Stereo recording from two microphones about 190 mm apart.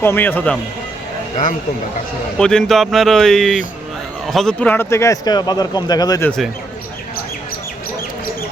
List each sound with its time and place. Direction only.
0.0 s speech: 10° left (ahead or behind)
2.4 s speech: 5° left (ahead or behind)